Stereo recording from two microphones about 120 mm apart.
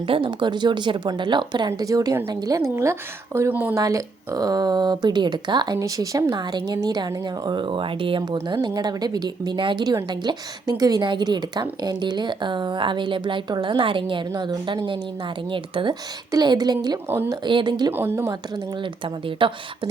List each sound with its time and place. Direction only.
0.0 s a woman's voice: 45° right (ahead or behind); by 3.8 s 15° right (ahead or behind)
3.8 s speech: 30° right (ahead or behind)
17.1 s a woman's voice: 20° right (ahead or behind)
17.4 s speech: 40° right (ahead or behind)
17.9 s a woman's voice: 20° right (ahead or behind)
18.3 s a woman's voice: 35° right (ahead or behind)